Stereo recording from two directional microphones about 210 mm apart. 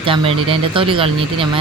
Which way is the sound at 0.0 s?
25° right (ahead or behind).